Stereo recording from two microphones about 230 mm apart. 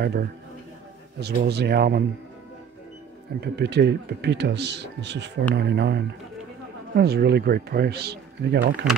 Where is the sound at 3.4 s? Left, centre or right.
Right.